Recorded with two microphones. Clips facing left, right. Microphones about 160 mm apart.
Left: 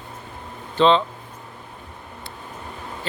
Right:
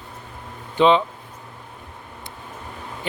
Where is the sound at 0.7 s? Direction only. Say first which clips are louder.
Right 1 dB; 10° right (ahead or behind).